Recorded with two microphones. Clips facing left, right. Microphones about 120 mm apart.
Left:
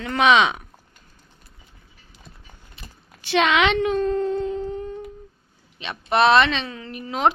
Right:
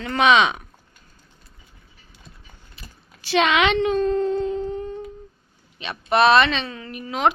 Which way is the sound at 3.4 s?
15° right (ahead or behind).